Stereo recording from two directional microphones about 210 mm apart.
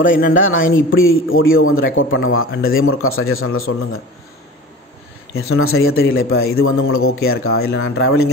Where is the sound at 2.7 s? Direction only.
80° left.